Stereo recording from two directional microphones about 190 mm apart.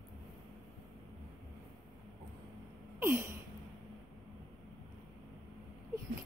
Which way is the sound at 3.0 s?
15° right (ahead or behind).